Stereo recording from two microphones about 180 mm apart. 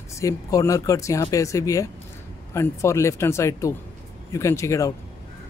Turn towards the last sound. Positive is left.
turn(degrees=15)  # may be behind; listen again after turning